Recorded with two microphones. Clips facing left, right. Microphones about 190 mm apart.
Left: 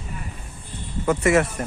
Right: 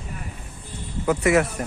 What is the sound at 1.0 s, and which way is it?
Speech, centre (ahead or behind).